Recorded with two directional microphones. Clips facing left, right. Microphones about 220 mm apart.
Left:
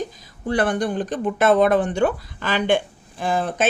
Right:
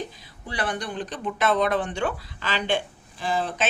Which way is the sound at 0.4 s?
50° left (ahead or behind).